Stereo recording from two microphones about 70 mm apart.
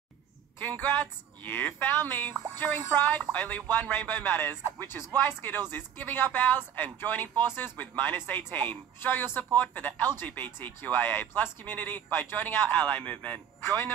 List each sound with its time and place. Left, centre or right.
0.6 s speech: left